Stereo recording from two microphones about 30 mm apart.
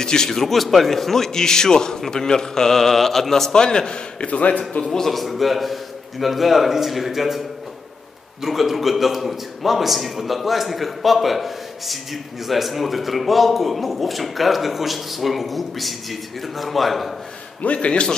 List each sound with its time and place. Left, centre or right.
0.0 s a man's voice: left
0.4 s a man's voice: centre
3.5 s a man's voice: left
4.3 s a man's voice: left
4.9 s a man's voice: centre
17.7 s speech: left